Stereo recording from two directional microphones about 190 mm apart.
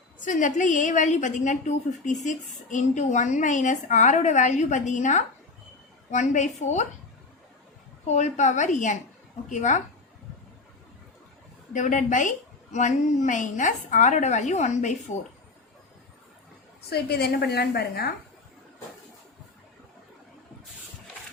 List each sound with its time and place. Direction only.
0.2 s a woman's voice: 40° left (ahead or behind)
8.0 s a woman's voice: 40° left (ahead or behind)
11.7 s a woman's voice: 40° left (ahead or behind)
16.9 s a woman's voice: 55° left (ahead or behind)